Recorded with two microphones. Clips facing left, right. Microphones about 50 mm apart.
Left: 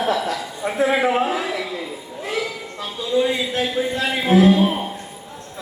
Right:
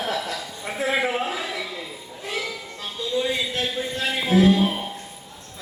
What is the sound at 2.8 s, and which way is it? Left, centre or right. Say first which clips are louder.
Speech: left 6 dB; left.